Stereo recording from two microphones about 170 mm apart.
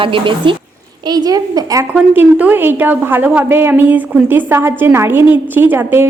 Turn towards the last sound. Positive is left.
turn(degrees=-10)  # may be behind; listen again after turning